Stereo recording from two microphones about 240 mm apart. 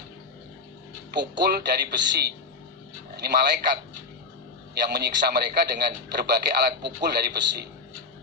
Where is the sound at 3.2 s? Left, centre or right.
Right.